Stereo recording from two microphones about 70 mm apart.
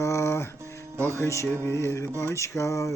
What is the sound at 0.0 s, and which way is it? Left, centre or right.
Music, left.